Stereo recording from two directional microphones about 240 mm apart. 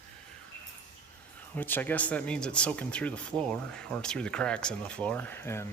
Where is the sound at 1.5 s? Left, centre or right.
Centre.